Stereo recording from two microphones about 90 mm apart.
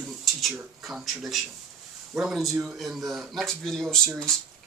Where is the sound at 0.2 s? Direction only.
Centre (ahead or behind).